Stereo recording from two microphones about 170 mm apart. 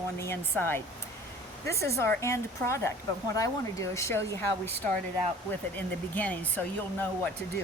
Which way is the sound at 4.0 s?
15° left (ahead or behind).